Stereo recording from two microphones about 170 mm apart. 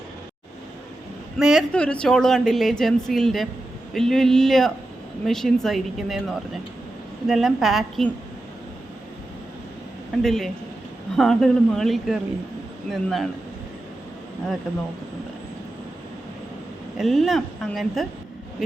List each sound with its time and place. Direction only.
1.4 s a woman's voice: centre (ahead or behind)
10.2 s a woman's voice: centre (ahead or behind)
17.0 s a woman's voice: centre (ahead or behind)